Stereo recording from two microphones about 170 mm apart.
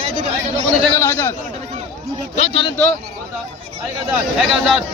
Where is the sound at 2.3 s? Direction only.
35° left (ahead or behind).